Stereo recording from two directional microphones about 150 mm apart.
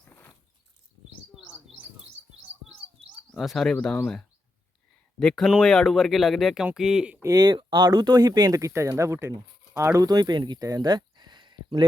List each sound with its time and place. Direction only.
0.0 s a sound: 15° left (ahead or behind)
3.3 s speech: centre (ahead or behind)
7.2 s speech: 25° right (ahead or behind)